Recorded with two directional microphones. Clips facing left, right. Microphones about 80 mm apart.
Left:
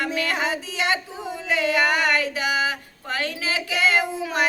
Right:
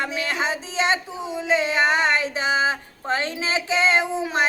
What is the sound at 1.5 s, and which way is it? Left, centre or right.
Speech, right.